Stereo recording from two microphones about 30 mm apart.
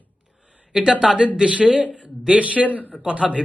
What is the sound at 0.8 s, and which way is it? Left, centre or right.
A man's voice, right.